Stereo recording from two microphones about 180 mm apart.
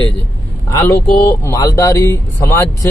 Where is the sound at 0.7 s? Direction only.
15° left (ahead or behind).